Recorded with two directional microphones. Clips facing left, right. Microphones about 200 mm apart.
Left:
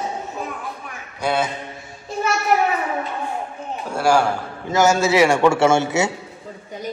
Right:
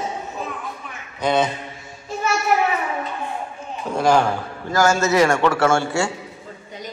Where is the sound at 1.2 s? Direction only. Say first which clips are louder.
Right 2 dB; 10° left (ahead or behind).